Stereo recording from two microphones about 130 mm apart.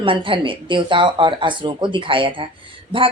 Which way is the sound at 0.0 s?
40° right (ahead or behind).